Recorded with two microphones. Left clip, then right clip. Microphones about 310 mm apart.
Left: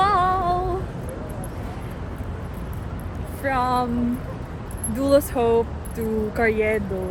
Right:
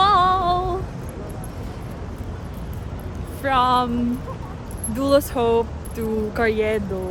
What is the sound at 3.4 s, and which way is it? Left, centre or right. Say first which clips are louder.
Speech: right 4 dB; centre.